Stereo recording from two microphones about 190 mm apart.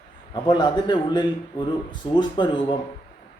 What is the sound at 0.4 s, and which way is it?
A man's voice, 25° left (ahead or behind).